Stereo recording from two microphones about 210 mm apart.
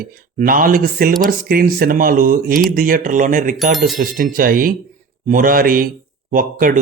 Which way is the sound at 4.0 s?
40° right (ahead or behind).